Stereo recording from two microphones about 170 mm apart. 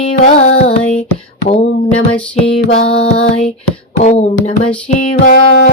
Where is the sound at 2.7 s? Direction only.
35° left (ahead or behind).